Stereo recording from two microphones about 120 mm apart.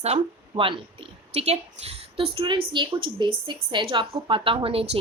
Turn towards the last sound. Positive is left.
turn(degrees=-50)  # may be behind; listen again after turning